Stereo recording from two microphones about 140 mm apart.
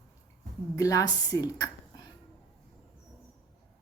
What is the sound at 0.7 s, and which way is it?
Speech, 25° left (ahead or behind).